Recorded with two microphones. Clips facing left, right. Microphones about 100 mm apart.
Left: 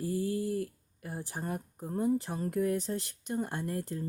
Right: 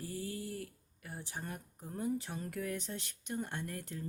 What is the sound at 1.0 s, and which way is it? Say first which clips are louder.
Speech: left 7 dB; 40° left (ahead or behind).